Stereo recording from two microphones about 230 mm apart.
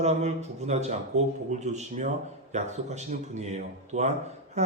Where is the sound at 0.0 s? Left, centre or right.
Right.